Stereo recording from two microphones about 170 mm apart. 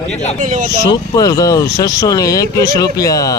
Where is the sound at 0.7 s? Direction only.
20° left (ahead or behind).